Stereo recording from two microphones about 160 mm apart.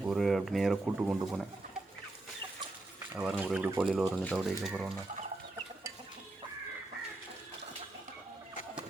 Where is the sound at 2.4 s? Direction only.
30° right (ahead or behind).